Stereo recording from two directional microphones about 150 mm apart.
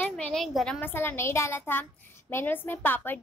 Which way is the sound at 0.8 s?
15° left (ahead or behind).